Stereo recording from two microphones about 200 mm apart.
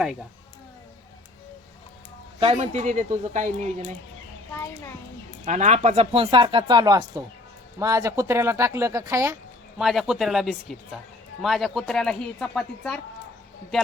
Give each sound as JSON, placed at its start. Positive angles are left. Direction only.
{"t": 2.4, "sound": "speech", "side_deg": -30}
{"t": 4.5, "sound": "a child's voice", "side_deg": 10}
{"t": 5.5, "sound": "speech", "side_deg": -35}
{"t": 9.7, "sound": "speech", "side_deg": 0}